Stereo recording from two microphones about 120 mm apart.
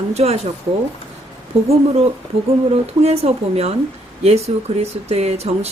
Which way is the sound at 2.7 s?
60° right (ahead or behind).